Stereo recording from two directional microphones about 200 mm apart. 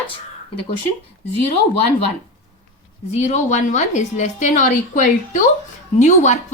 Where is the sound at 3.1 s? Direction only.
35° left (ahead or behind).